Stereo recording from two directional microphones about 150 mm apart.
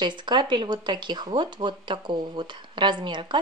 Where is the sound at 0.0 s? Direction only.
30° right (ahead or behind).